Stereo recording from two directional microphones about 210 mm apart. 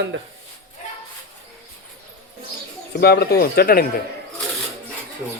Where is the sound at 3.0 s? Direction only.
50° left (ahead or behind).